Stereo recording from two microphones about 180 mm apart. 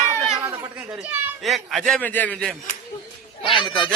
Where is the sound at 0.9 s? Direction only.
5° right (ahead or behind).